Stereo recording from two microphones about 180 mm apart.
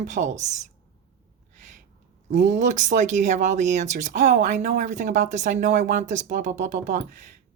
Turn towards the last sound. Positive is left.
turn(degrees=-45)  # may be behind; listen again after turning